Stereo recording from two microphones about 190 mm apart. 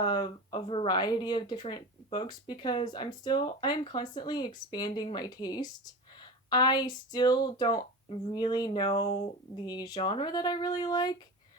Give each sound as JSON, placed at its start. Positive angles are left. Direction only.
{"t": 0.0, "sound": "speech", "side_deg": 25}